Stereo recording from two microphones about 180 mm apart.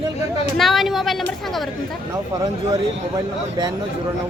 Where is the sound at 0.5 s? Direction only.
Centre (ahead or behind).